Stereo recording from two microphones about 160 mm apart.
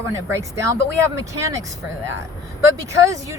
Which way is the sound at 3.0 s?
20° right (ahead or behind).